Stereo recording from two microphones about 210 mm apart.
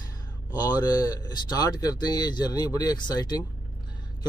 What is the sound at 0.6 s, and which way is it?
Speech, 20° left (ahead or behind).